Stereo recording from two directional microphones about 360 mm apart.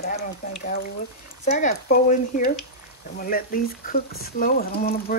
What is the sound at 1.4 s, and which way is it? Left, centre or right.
Speech, left.